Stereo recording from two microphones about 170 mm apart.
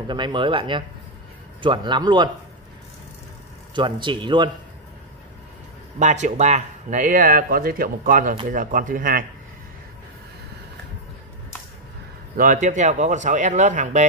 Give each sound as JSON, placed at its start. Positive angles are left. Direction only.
{"t": 0.1, "sound": "speech", "side_deg": -30}
{"t": 3.7, "sound": "speech", "side_deg": -30}
{"t": 5.9, "sound": "speech", "side_deg": -45}
{"t": 12.4, "sound": "speech", "side_deg": -50}